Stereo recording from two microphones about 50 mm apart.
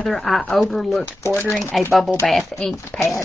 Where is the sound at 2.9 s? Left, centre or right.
Left.